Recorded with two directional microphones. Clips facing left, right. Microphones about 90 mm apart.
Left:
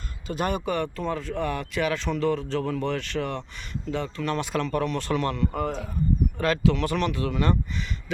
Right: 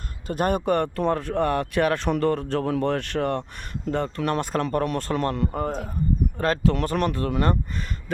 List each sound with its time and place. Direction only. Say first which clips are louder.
0.3 s speech: right 4 dB; 50° right (ahead or behind)